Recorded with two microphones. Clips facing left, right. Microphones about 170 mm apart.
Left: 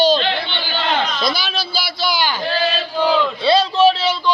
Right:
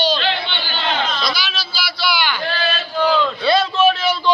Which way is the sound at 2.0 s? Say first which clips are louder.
Even; 40° left (ahead or behind).